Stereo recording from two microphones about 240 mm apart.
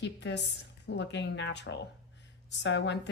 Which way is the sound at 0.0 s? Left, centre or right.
Left.